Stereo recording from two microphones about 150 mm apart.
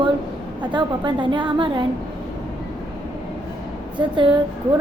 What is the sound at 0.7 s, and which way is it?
A woman's voice, 30° right (ahead or behind).